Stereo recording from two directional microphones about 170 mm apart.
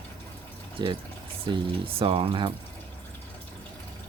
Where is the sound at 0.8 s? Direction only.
25° right (ahead or behind).